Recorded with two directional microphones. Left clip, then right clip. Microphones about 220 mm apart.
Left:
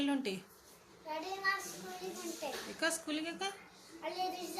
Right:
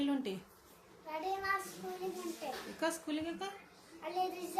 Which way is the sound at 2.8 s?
Centre (ahead or behind).